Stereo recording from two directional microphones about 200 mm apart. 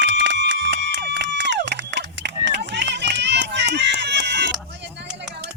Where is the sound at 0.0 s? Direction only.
60° right (ahead or behind).